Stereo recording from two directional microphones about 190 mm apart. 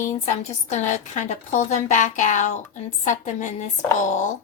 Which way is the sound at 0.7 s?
40° left (ahead or behind).